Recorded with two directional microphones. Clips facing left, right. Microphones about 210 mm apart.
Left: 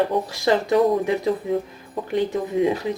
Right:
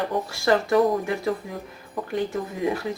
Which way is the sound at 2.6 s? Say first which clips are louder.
Left 4 dB; 20° left (ahead or behind).